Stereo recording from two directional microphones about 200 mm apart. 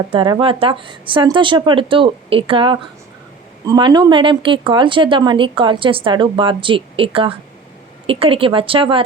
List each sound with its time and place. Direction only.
0.1 s speech: 25° right (ahead or behind)